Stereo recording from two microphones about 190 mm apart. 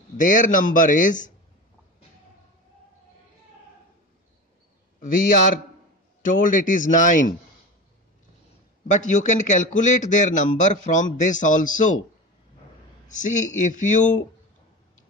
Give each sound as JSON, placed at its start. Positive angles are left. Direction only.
{"t": 0.2, "sound": "speech", "side_deg": 45}
{"t": 6.2, "sound": "speech", "side_deg": 45}
{"t": 8.8, "sound": "a man's voice", "side_deg": 40}
{"t": 13.1, "sound": "a man's voice", "side_deg": 40}